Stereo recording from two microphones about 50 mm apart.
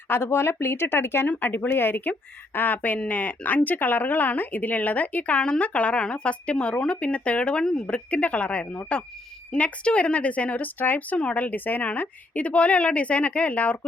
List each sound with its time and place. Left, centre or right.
0.1 s speech: left
1.3 s a woman's voice: left
7.6 s speech: centre
7.9 s a woman's voice: left
10.8 s speech: left
11.2 s a woman's voice: left